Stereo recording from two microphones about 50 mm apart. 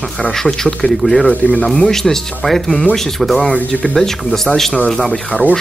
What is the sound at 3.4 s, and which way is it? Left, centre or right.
Speech, left.